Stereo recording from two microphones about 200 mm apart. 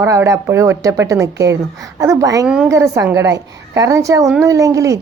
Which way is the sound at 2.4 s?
5° right (ahead or behind).